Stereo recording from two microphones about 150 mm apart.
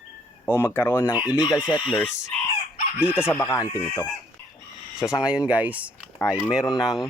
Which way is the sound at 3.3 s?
20° left (ahead or behind).